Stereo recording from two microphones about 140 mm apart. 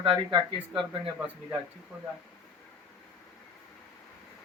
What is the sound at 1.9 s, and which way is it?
Speech, 10° right (ahead or behind).